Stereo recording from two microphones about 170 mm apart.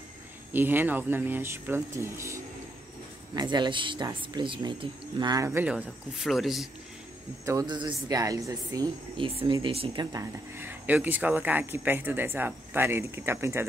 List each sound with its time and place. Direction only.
0.5 s speech: 10° right (ahead or behind)
7.4 s speech: 25° right (ahead or behind)
10.1 s speech: 15° right (ahead or behind)